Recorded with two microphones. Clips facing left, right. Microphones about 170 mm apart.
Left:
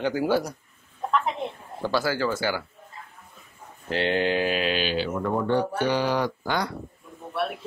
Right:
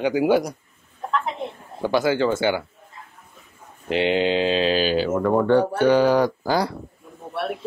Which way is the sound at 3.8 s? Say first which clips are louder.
Right 4 dB; 20° right (ahead or behind).